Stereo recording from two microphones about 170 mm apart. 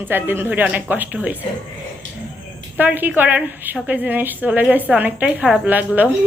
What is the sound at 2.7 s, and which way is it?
A woman's voice, 10° right (ahead or behind).